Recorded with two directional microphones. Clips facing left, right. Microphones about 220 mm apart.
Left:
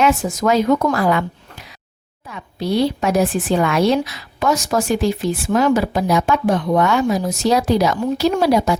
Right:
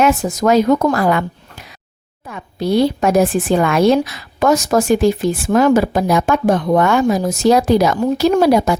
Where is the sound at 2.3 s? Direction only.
50° right (ahead or behind).